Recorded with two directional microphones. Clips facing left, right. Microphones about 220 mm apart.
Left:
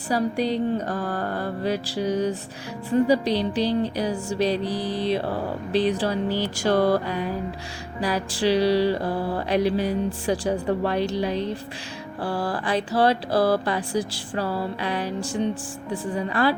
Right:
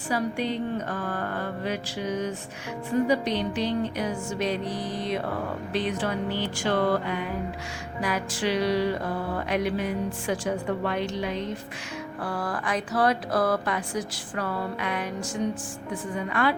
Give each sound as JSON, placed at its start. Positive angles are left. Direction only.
{"t": 0.1, "sound": "music", "side_deg": 35}